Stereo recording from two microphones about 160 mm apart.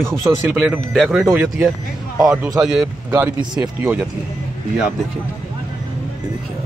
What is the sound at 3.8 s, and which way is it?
Speech, 10° right (ahead or behind).